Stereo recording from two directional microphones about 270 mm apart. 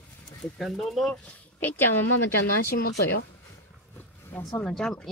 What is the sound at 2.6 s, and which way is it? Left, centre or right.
Speech, left.